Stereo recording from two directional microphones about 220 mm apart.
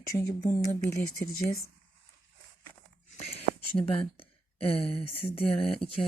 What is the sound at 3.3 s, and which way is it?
Speech, 25° left (ahead or behind).